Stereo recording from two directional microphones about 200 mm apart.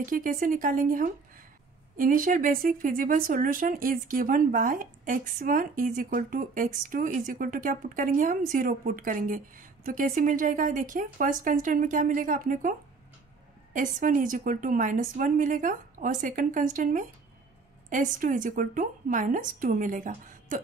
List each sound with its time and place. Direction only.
0.0 s speech: 45° right (ahead or behind)
13.7 s a woman's voice: 40° right (ahead or behind)